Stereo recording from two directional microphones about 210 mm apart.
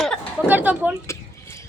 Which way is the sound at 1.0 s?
15° left (ahead or behind).